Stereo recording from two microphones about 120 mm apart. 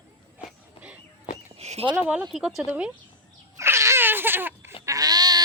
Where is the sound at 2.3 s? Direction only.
Centre (ahead or behind).